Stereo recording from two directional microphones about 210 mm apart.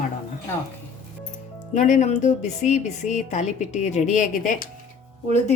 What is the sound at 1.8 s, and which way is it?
A woman's voice, 35° left (ahead or behind).